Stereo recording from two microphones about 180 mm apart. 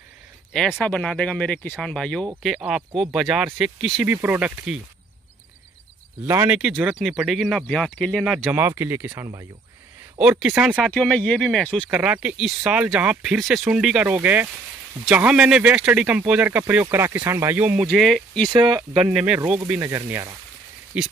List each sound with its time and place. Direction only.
0.5 s speech: 5° left (ahead or behind)
4.0 s speech: 10° right (ahead or behind)
6.2 s speech: 15° right (ahead or behind)
6.5 s speech: 5° right (ahead or behind)
8.5 s speech: 10° right (ahead or behind)
10.3 s speech: 10° right (ahead or behind)
10.9 s speech: 5° left (ahead or behind)
11.9 s speech: 10° right (ahead or behind)
17.8 s speech: centre (ahead or behind)
18.5 s speech: 20° right (ahead or behind)
18.9 s speech: 5° right (ahead or behind)
20.9 s speech: 5° right (ahead or behind)